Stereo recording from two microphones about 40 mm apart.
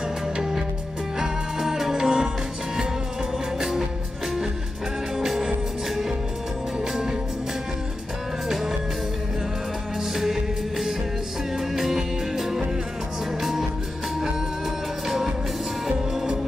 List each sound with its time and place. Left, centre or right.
0.4 s music: centre
3.5 s music: centre
5.1 s music: centre
6.8 s music: centre
10.1 s music: centre